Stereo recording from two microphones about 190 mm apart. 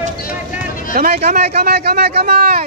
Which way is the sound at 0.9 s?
50° right (ahead or behind).